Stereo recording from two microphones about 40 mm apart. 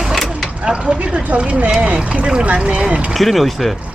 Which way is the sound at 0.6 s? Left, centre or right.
Right.